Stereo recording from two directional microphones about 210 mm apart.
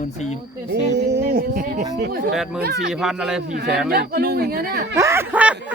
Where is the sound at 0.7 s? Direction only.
50° right (ahead or behind).